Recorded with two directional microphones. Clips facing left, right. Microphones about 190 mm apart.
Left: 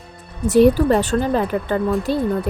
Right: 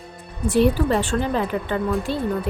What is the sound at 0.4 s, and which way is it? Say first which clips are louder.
Speech: left 5 dB; 45° left (ahead or behind).